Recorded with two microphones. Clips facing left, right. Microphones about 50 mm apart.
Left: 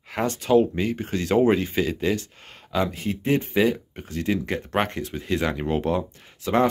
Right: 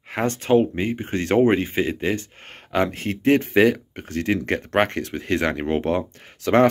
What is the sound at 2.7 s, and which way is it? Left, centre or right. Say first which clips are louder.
Speech: right 3 dB; right.